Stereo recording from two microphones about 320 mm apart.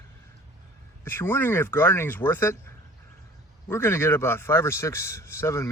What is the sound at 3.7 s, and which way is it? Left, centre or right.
Speech, centre.